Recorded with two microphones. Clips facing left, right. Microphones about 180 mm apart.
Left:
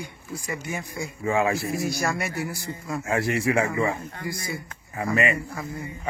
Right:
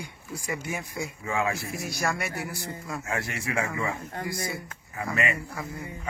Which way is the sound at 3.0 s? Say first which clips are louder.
Left 10 dB; 30° left (ahead or behind).